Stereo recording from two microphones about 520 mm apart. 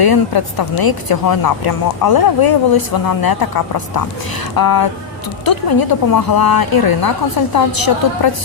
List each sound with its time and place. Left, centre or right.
0.0 s a woman's voice: left